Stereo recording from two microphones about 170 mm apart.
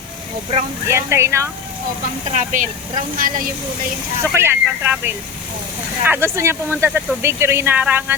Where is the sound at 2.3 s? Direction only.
50° right (ahead or behind).